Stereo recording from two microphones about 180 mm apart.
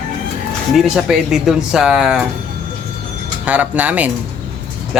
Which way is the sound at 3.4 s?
10° right (ahead or behind).